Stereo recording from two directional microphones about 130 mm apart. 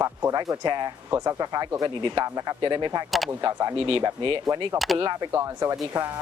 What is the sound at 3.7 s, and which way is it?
Speech, 45° right (ahead or behind).